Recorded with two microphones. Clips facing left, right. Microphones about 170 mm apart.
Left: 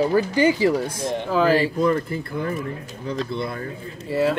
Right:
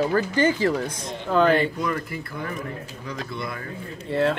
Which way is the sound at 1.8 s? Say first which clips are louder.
Left 7 dB; 30° left (ahead or behind).